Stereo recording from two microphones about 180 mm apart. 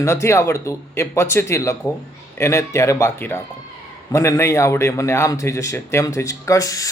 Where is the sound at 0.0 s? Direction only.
15° left (ahead or behind).